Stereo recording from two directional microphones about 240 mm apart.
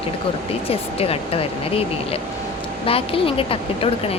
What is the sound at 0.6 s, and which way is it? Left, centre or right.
Speech, left.